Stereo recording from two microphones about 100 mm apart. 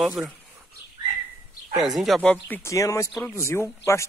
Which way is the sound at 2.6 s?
30° left (ahead or behind).